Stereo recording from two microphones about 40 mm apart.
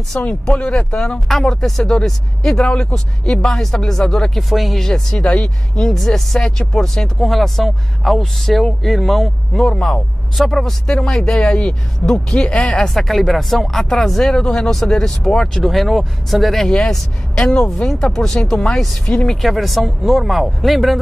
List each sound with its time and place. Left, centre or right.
0.1 s speech: left
0.5 s speech: left
2.6 s speech: left
4.4 s speech: centre
4.7 s speech: centre
5.8 s speech: centre
7.2 s speech: centre; by 12.6 s left
12.8 s speech: centre
16.6 s speech: centre
19.4 s speech: centre